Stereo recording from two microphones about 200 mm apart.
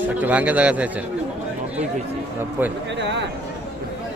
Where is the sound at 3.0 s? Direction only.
60° right (ahead or behind).